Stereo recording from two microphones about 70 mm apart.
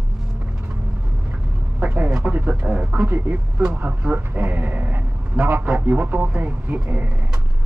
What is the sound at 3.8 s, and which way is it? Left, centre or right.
A man's voice, centre.